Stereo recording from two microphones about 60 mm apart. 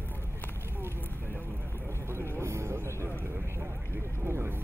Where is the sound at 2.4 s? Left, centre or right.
Right.